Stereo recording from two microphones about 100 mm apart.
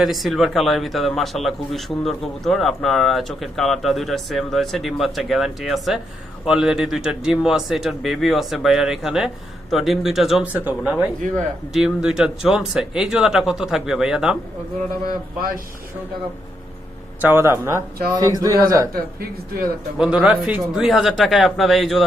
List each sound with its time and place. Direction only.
0.0 s speech: centre (ahead or behind)
10.4 s speech: 15° right (ahead or behind)
11.7 s speech: 5° right (ahead or behind)
17.2 s speech: 25° right (ahead or behind)
18.1 s a man's voice: 40° right (ahead or behind)
20.0 s speech: 10° right (ahead or behind)